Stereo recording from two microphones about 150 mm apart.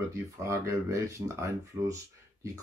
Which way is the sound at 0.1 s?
20° right (ahead or behind).